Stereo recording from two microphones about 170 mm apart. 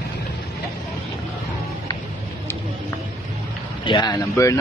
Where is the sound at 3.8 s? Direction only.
25° left (ahead or behind).